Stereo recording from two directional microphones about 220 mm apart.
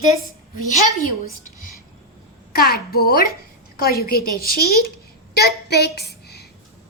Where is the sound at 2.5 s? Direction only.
45° left (ahead or behind).